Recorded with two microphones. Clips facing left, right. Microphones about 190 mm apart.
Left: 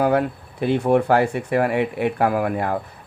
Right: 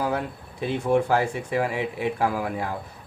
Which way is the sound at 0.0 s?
65° left (ahead or behind).